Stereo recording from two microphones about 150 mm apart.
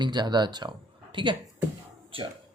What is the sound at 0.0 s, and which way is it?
Speech, 30° right (ahead or behind).